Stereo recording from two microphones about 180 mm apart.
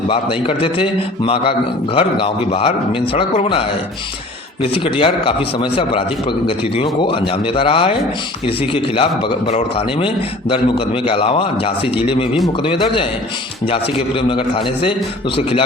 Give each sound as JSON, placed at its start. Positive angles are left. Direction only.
{"t": 0.1, "sound": "a man's voice", "side_deg": 30}
{"t": 7.0, "sound": "a man's voice", "side_deg": 30}
{"t": 14.2, "sound": "a man's voice", "side_deg": 30}